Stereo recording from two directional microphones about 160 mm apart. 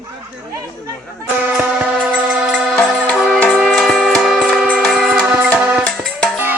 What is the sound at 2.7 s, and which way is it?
Music, 5° left (ahead or behind).